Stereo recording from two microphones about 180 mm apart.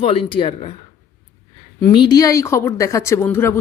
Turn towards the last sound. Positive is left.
turn(degrees=10)  # may be behind; listen again after turning